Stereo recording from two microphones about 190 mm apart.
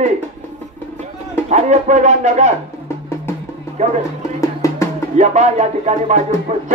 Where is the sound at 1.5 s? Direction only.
35° right (ahead or behind).